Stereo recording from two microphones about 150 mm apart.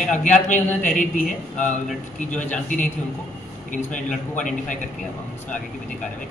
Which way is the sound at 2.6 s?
60° left (ahead or behind).